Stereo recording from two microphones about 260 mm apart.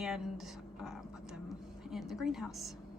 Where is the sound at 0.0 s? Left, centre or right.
Centre.